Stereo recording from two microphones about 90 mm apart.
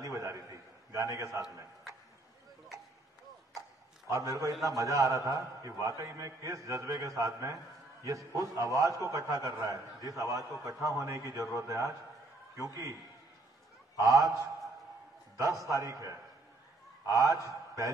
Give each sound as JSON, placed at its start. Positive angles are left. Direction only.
{"t": 0.0, "sound": "a sound", "side_deg": -35}
{"t": 4.1, "sound": "a man's voice", "side_deg": -35}
{"t": 13.9, "sound": "a man's voice", "side_deg": -35}